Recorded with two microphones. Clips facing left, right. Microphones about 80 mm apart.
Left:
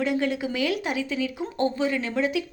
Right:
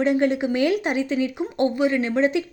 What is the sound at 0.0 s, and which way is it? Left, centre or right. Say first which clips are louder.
A woman's voice: right 5 dB; right.